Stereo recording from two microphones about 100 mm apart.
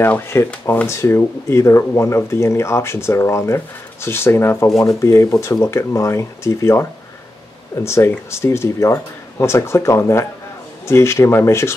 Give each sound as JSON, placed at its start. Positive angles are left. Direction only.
{"t": 0.0, "sound": "speech", "side_deg": 25}
{"t": 0.8, "sound": "speech", "side_deg": 30}